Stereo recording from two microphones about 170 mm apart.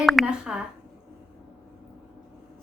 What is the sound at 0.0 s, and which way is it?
Speech, centre (ahead or behind).